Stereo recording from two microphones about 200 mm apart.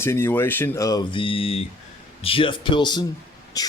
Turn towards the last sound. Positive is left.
turn(degrees=20)  # may be behind; listen again after turning